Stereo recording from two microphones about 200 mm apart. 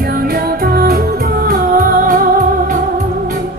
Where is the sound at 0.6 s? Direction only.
50° right (ahead or behind).